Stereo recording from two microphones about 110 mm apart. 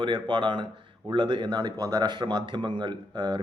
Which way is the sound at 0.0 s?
50° right (ahead or behind).